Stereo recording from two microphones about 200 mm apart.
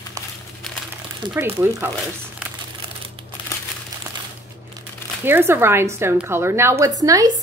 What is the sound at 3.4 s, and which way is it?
Crumpling, 25° left (ahead or behind).